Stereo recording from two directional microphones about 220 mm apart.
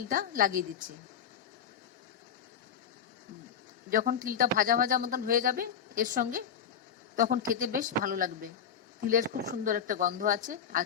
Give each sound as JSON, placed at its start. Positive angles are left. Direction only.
{"t": 0.1, "sound": "a man's voice", "side_deg": -40}
{"t": 3.8, "sound": "a man's voice", "side_deg": -40}